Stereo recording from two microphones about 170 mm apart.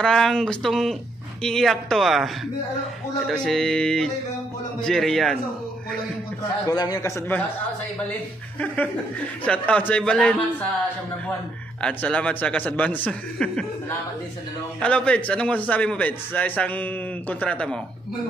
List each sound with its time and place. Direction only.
0.0 s speech: 5° left (ahead or behind)
6.7 s a man's voice: 20° left (ahead or behind)
9.4 s a man's voice: 5° left (ahead or behind)
11.8 s a man's voice: 5° left (ahead or behind)